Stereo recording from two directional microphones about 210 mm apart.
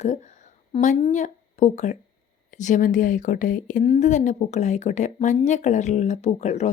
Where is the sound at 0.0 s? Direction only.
35° left (ahead or behind).